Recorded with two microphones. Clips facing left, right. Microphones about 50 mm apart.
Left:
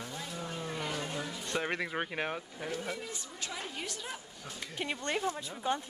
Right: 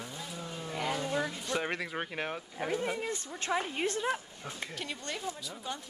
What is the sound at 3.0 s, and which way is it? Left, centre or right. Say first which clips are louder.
Speech: right 5 dB; right.